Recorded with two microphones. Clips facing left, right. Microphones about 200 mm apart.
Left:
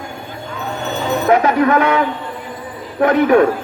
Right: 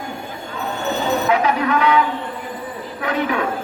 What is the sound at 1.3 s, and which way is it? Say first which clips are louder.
A man's voice: left 8 dB; 45° left (ahead or behind).